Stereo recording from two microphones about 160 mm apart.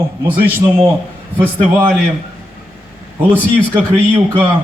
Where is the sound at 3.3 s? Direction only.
10° right (ahead or behind).